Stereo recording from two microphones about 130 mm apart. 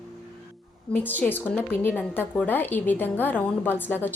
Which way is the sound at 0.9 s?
15° left (ahead or behind).